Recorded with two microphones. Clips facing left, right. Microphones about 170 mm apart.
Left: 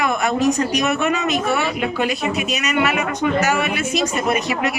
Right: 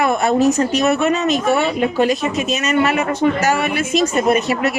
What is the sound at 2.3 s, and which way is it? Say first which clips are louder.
Speech: right 3 dB; 10° left (ahead or behind).